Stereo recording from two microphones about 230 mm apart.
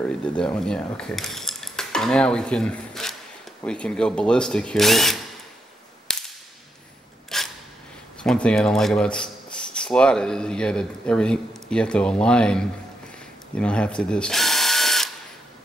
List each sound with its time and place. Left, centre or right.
0.2 s speech: centre
6.1 s whip: centre
7.3 s a sound: centre
8.2 s speech: centre
13.6 s drill: centre